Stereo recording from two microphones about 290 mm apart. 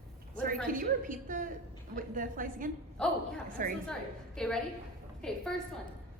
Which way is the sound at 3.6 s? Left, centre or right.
Right.